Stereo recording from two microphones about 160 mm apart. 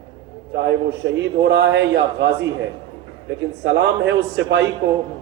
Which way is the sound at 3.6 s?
90° right.